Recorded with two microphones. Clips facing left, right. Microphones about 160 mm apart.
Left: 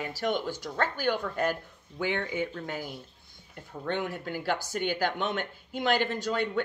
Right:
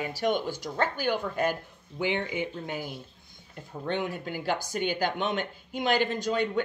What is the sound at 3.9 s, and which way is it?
Speech, 20° right (ahead or behind).